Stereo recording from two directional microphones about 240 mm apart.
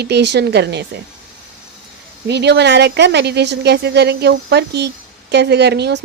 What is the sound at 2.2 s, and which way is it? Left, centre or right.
Speech, right.